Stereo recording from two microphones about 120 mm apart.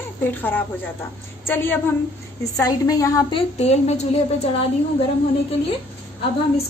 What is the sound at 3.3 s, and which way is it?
Speech, 60° left (ahead or behind).